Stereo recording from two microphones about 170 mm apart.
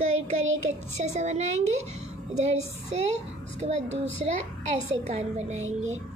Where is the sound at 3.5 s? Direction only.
40° right (ahead or behind).